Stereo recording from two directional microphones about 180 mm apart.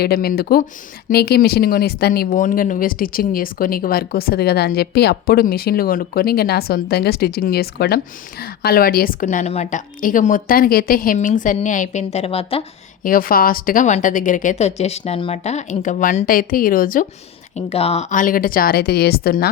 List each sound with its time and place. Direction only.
0.0 s speech: 60° left (ahead or behind); by 12.6 s 30° left (ahead or behind)
13.0 s speech: 50° left (ahead or behind)
17.5 s speech: 35° left (ahead or behind); by 19.5 s 60° left (ahead or behind)